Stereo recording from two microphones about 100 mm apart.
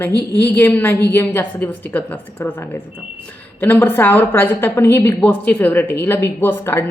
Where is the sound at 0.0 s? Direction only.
20° left (ahead or behind).